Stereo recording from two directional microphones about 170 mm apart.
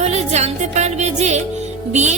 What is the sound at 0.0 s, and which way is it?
Music, 40° right (ahead or behind).